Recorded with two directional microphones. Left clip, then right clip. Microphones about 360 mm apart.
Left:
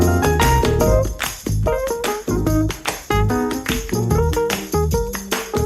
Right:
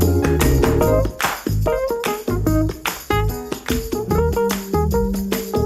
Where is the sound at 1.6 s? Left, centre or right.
Centre.